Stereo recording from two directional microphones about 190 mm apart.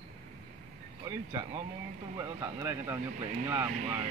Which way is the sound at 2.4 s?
15° right (ahead or behind).